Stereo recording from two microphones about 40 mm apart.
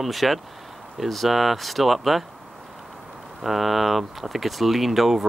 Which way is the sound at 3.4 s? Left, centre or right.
Centre.